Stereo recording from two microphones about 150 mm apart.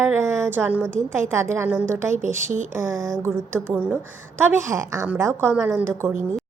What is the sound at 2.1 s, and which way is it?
Speech, 55° right (ahead or behind).